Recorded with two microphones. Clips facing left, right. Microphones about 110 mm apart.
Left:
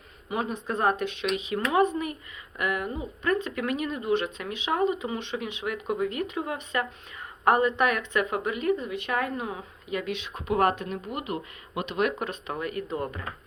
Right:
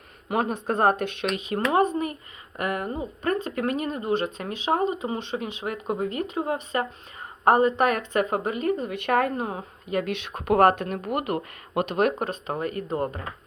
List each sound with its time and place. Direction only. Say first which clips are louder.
0.3 s speech: right 4 dB; 55° right (ahead or behind); by 8.9 s 40° right (ahead or behind)
8.9 s speech: right 5 dB; 60° right (ahead or behind); by 13.2 s 40° right (ahead or behind)